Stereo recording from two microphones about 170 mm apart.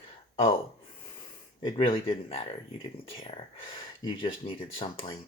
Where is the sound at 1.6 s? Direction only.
30° left (ahead or behind).